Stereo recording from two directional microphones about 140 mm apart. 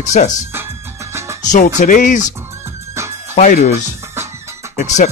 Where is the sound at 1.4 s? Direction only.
60° left (ahead or behind).